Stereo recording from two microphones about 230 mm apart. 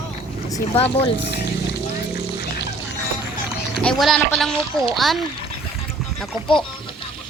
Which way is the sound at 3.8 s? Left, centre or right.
Centre.